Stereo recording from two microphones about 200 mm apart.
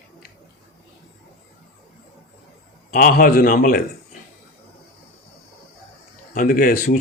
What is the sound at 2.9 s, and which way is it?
Speech, 45° left (ahead or behind).